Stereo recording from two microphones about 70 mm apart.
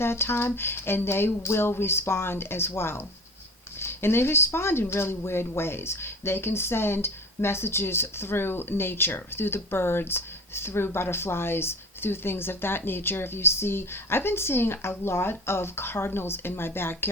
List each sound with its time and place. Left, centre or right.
0.0 s speech: left